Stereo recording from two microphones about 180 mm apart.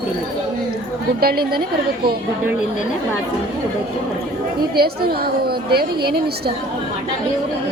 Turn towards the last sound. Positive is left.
turn(degrees=-60)  # may be behind; listen again after turning